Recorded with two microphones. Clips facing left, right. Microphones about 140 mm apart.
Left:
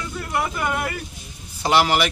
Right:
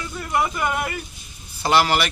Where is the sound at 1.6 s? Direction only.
15° left (ahead or behind).